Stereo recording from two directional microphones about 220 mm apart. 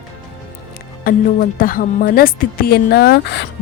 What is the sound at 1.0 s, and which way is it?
A woman's voice, 40° left (ahead or behind).